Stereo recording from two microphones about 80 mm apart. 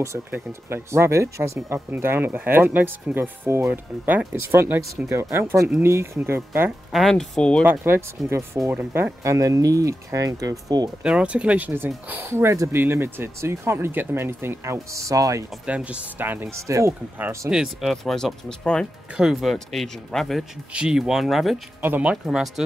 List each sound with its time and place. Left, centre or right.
0.5 s speech: right
6.9 s speech: centre
8.9 s speech: right
11.0 s speech: centre; by 15.4 s right
15.6 s speech: centre
16.5 s speech: right
17.5 s speech: centre
19.1 s speech: centre
20.7 s speech: centre
21.8 s speech: right
22.1 s speech: centre